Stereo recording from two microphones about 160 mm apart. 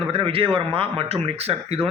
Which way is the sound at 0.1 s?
35° right (ahead or behind).